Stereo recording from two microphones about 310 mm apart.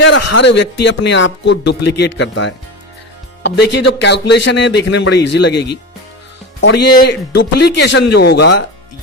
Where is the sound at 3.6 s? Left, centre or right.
Left.